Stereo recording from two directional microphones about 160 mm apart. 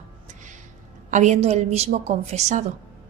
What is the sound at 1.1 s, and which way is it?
Speech, 50° right (ahead or behind).